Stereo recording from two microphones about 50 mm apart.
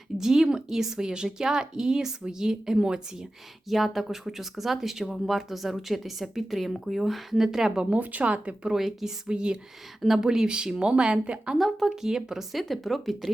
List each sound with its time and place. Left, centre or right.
0.2 s speech: centre
3.7 s a woman's voice: centre
7.9 s speech: right
8.7 s speech: centre
10.0 s a woman's voice: centre
10.2 s speech: centre
11.5 s a woman's voice: centre
11.9 s a woman's voice: centre